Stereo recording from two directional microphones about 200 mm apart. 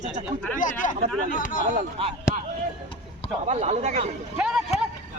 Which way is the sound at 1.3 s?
45° left (ahead or behind).